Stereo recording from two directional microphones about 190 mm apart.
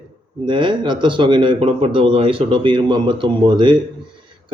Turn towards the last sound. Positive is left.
turn(degrees=-25)  # may be behind; listen again after turning